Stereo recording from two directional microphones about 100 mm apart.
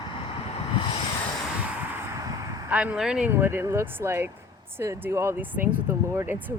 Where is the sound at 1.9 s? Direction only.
30° right (ahead or behind).